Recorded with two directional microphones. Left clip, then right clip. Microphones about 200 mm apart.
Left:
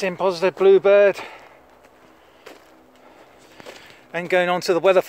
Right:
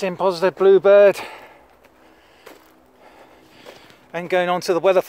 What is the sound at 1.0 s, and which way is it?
Speech, 50° right (ahead or behind).